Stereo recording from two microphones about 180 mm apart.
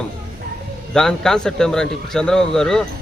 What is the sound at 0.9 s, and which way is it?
Speech, 5° left (ahead or behind).